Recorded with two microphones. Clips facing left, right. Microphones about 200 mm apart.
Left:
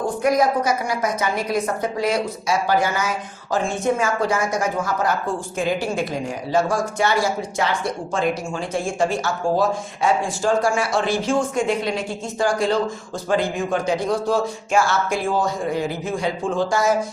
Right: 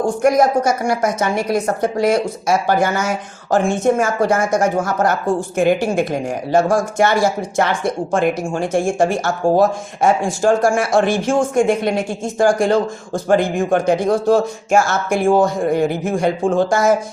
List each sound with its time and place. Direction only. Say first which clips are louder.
0.2 s speech: right 4 dB; 45° right (ahead or behind)
5.5 s speech: right 7 dB; 60° right (ahead or behind)